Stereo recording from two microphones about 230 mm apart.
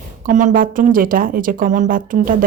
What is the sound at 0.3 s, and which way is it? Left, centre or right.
A woman's voice, right.